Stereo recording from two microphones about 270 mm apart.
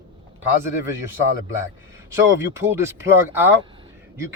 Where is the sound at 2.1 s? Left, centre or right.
Centre.